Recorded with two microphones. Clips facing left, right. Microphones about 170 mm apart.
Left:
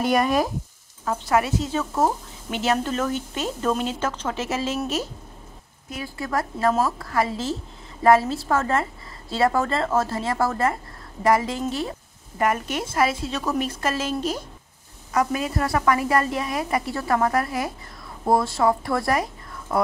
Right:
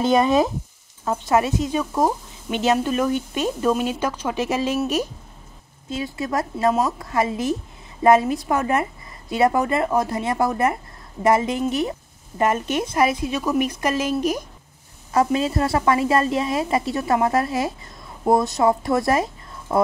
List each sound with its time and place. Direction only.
0.0 s a woman's voice: 25° right (ahead or behind)
15.1 s a woman's voice: 25° right (ahead or behind)